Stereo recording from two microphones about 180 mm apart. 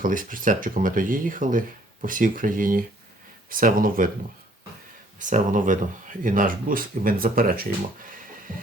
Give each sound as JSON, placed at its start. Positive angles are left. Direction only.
{"t": 0.0, "sound": "speech", "side_deg": -50}
{"t": 5.3, "sound": "speech", "side_deg": -45}